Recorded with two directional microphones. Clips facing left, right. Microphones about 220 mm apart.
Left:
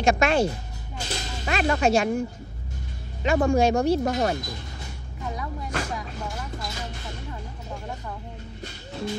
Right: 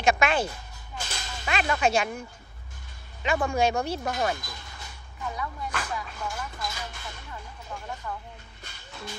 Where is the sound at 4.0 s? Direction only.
40° left (ahead or behind).